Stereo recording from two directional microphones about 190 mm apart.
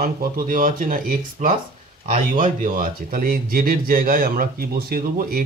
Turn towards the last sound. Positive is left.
turn(degrees=-50)  # may be behind; listen again after turning